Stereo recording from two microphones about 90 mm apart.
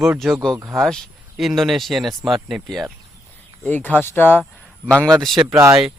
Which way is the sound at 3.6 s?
20° left (ahead or behind).